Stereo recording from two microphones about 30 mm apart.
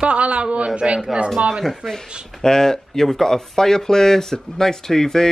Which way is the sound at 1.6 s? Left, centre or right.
Centre.